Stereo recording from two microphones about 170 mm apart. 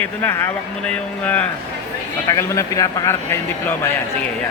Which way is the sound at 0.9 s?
10° left (ahead or behind).